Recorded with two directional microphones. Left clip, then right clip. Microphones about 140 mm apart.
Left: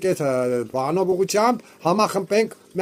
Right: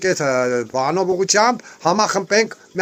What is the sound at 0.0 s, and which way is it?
Speech, 20° left (ahead or behind).